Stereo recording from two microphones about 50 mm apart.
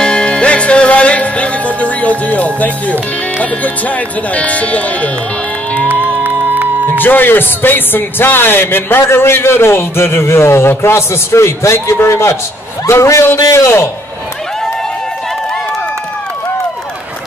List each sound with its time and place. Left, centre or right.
0.0 s music: centre
6.2 s music: right
6.9 s a man's voice: left